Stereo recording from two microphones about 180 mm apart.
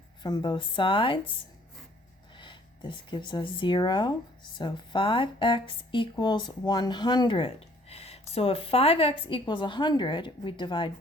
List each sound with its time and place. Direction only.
0.2 s speech: 25° left (ahead or behind)